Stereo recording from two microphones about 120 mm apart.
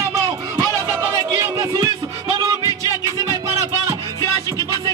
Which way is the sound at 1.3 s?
30° right (ahead or behind).